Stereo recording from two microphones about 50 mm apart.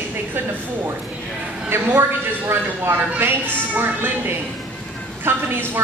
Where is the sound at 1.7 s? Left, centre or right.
Right.